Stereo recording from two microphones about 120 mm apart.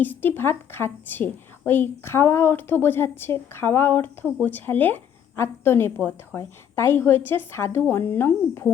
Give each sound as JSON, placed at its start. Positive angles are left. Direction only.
{"t": 0.0, "sound": "a woman's voice", "side_deg": 15}